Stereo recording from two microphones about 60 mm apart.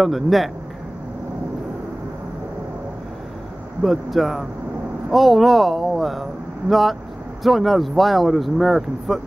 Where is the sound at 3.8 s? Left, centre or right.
Centre.